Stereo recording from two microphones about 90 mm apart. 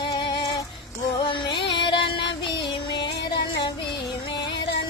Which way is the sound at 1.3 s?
60° left (ahead or behind).